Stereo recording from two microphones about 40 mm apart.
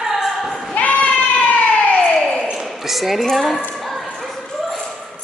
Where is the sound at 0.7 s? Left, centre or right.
Left.